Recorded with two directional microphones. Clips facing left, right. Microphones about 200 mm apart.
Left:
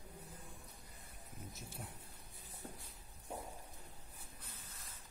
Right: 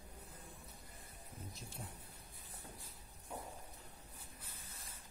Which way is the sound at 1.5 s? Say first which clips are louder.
Left 1 dB; centre (ahead or behind).